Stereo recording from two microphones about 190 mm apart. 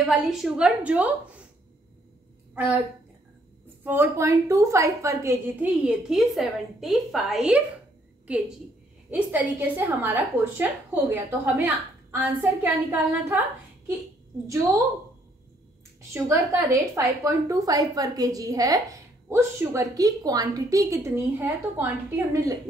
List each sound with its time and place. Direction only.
0.0 s a woman's voice: centre (ahead or behind)
2.5 s a woman's voice: 10° right (ahead or behind)
3.8 s a woman's voice: 10° right (ahead or behind)
9.1 s a woman's voice: 10° right (ahead or behind)
14.5 s a woman's voice: 15° right (ahead or behind)
16.1 s a woman's voice: 15° right (ahead or behind)